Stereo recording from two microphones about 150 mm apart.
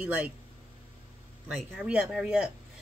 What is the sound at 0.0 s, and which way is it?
Speech, 10° right (ahead or behind).